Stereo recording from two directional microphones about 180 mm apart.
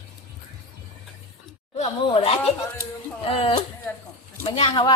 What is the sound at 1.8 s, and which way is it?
Speech, 35° left (ahead or behind).